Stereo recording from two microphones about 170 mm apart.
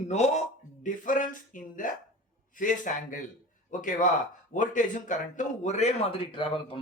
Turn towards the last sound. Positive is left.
turn(degrees=30)  # may be behind; listen again after turning